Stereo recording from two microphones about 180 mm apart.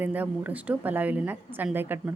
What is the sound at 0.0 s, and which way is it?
A woman's voice, 10° right (ahead or behind).